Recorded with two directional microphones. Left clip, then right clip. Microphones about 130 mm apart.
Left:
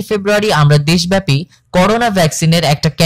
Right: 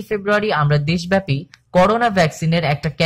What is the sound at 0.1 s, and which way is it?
Speech, 30° left (ahead or behind).